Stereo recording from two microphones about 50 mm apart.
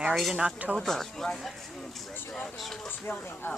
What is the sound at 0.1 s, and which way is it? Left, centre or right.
Speech, centre.